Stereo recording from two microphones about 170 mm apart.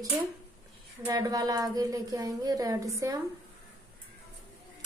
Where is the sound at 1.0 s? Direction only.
20° right (ahead or behind).